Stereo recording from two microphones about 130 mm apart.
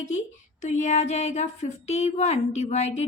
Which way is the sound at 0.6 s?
65° left (ahead or behind).